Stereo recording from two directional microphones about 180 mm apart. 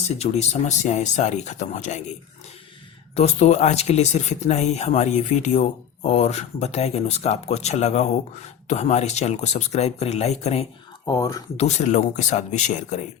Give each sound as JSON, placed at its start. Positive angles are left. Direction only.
{"t": 0.2, "sound": "speech", "side_deg": 40}
{"t": 3.2, "sound": "speech", "side_deg": 40}
{"t": 11.0, "sound": "speech", "side_deg": 20}
{"t": 11.5, "sound": "speech", "side_deg": 40}